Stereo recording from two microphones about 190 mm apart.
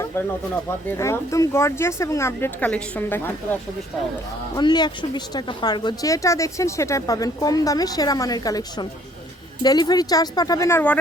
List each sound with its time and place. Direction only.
0.9 s speech: 15° left (ahead or behind)
4.5 s a woman's voice: 20° left (ahead or behind)